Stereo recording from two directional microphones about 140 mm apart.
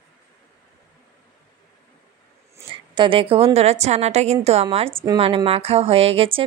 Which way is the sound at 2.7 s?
35° right (ahead or behind).